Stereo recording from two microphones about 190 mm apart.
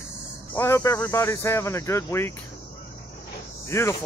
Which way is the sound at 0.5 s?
15° left (ahead or behind).